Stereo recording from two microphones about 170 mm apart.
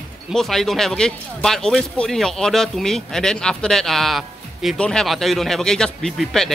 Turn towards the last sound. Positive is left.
turn(degrees=0)  # may be behind; listen again after turning